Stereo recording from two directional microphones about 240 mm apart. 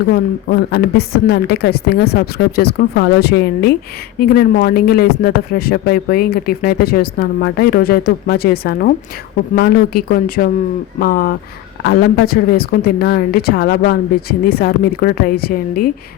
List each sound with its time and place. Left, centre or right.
0.1 s a woman's voice: left